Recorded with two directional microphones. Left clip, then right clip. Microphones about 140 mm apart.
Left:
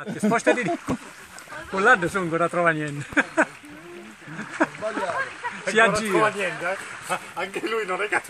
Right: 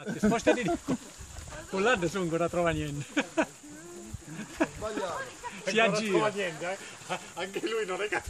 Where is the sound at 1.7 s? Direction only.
20° left (ahead or behind).